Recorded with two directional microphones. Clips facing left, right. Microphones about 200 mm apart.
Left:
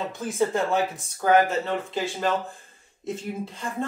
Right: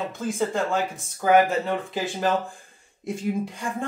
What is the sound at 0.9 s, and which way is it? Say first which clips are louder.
Speech: right 3 dB; 10° right (ahead or behind).